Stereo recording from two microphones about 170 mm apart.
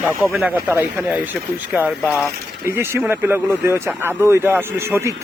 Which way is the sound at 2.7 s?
15° right (ahead or behind).